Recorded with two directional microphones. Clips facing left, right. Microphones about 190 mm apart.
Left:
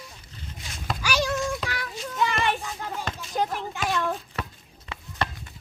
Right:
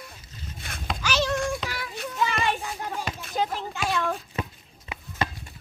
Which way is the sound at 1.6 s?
5° right (ahead or behind).